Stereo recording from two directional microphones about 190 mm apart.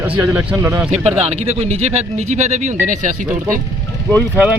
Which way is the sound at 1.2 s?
35° right (ahead or behind).